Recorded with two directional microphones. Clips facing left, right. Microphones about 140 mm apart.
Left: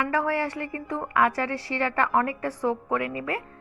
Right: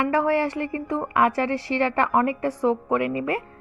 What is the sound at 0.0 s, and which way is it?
A woman's voice, 25° right (ahead or behind).